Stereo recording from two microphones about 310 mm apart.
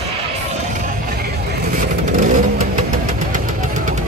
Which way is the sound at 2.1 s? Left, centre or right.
Right.